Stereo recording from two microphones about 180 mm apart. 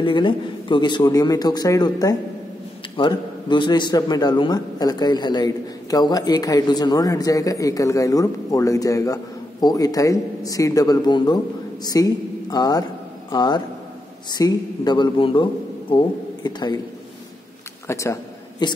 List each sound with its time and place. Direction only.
0.0 s a man's voice: 30° left (ahead or behind)
16.4 s a man's voice: 25° left (ahead or behind)
17.8 s a sound: 15° left (ahead or behind)